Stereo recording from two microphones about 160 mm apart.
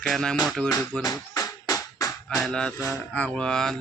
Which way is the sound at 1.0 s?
20° left (ahead or behind).